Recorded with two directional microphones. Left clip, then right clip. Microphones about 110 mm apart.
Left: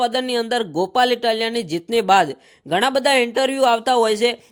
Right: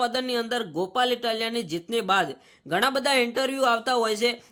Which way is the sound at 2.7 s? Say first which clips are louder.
Left 6 dB; 40° left (ahead or behind).